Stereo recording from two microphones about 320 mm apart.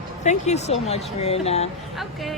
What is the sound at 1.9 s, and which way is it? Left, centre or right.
Speech, centre.